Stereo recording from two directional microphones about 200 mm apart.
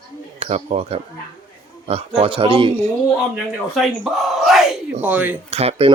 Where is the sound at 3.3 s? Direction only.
Centre (ahead or behind).